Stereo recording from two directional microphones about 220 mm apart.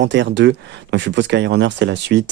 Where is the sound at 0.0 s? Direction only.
55° right (ahead or behind).